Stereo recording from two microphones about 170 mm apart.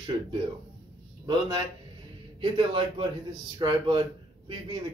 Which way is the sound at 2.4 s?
30° right (ahead or behind).